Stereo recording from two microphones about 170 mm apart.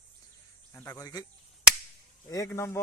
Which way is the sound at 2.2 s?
20° left (ahead or behind).